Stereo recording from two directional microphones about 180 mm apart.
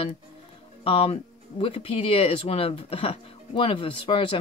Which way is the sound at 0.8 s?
30° left (ahead or behind).